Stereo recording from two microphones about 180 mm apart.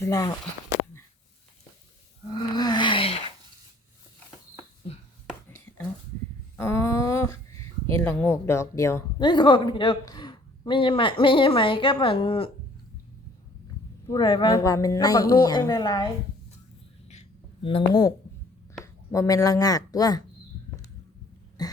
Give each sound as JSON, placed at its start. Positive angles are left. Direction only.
{"t": 0.0, "sound": "a woman's voice", "side_deg": 20}
{"t": 2.6, "sound": "a sound", "side_deg": 25}
{"t": 5.5, "sound": "whispering", "side_deg": 10}
{"t": 6.6, "sound": "a sound", "side_deg": 15}
{"t": 7.9, "sound": "a woman's voice", "side_deg": 10}
{"t": 14.1, "sound": "a woman's voice", "side_deg": 25}
{"t": 17.6, "sound": "a woman's voice", "side_deg": 30}
{"t": 19.1, "sound": "a woman's voice", "side_deg": 20}
{"t": 21.6, "sound": "throat clearing", "side_deg": 20}